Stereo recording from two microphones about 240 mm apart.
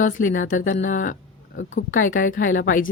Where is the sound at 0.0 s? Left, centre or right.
Left.